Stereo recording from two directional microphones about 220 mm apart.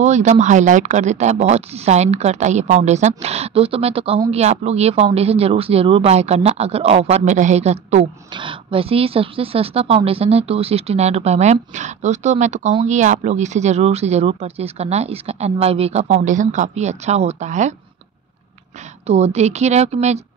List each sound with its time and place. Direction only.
0.0 s speech: 30° right (ahead or behind)
19.0 s speech: 30° right (ahead or behind)